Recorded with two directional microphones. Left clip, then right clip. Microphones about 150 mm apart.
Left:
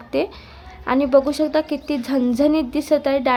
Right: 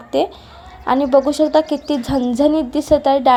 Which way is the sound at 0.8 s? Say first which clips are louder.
Right 3 dB; 30° left (ahead or behind).